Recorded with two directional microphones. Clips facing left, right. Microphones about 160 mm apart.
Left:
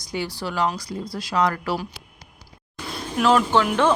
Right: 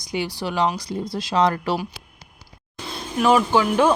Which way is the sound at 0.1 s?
20° right (ahead or behind).